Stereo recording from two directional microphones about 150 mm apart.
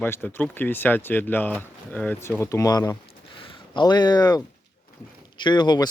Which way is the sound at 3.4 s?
35° left (ahead or behind).